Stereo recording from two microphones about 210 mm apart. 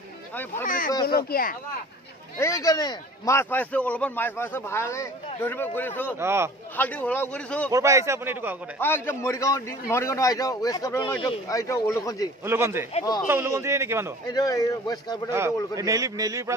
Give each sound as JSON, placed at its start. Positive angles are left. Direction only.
{"t": 0.3, "sound": "speech", "side_deg": 10}
{"t": 0.7, "sound": "speech", "side_deg": 40}
{"t": 2.3, "sound": "a man's voice", "side_deg": 15}
{"t": 6.1, "sound": "a man's voice", "side_deg": -10}
{"t": 6.8, "sound": "a man's voice", "side_deg": 5}
{"t": 7.7, "sound": "a man's voice", "side_deg": -15}
{"t": 8.7, "sound": "a man's voice", "side_deg": 10}
{"t": 12.4, "sound": "a man's voice", "side_deg": -10}
{"t": 14.3, "sound": "a man's voice", "side_deg": 15}
{"t": 15.7, "sound": "a man's voice", "side_deg": -15}